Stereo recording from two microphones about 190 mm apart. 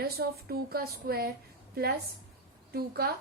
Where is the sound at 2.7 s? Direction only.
55° right (ahead or behind).